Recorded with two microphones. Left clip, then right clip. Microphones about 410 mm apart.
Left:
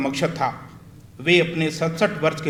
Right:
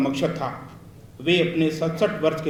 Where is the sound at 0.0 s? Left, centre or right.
Left.